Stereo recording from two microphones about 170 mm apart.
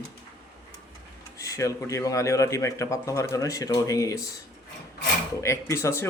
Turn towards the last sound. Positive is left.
turn(degrees=15)  # may be behind; listen again after turning